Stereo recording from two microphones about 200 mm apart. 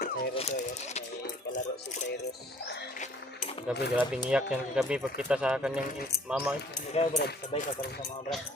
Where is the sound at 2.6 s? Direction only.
55° left (ahead or behind).